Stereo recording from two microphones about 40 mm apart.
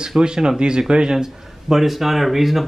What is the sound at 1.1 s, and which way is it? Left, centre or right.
Speech, centre.